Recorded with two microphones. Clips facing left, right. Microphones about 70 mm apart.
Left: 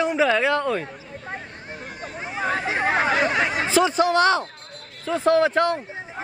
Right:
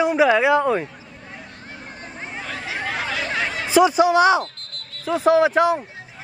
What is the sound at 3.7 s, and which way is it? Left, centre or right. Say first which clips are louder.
A man's voice: right 6 dB; centre.